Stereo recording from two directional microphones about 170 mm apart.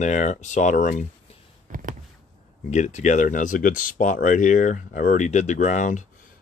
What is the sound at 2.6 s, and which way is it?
Speech, 40° left (ahead or behind).